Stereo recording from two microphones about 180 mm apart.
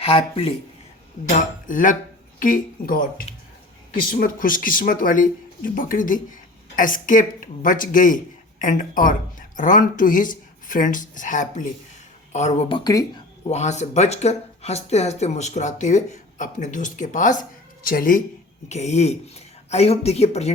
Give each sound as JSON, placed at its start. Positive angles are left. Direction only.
{"t": 0.0, "sound": "speech", "side_deg": 30}
{"t": 1.2, "sound": "speech", "side_deg": 45}
{"t": 13.5, "sound": "speech", "side_deg": 40}
{"t": 18.7, "sound": "speech", "side_deg": 40}